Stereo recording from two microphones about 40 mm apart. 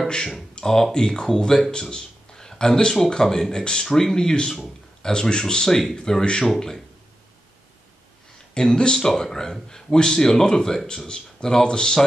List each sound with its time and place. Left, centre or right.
0.6 s speech: centre
8.5 s speech: left